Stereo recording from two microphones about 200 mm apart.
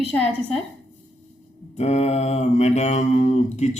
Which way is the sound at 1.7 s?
35° left (ahead or behind).